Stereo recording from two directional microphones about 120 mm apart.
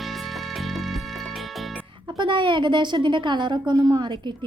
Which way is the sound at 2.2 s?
40° right (ahead or behind).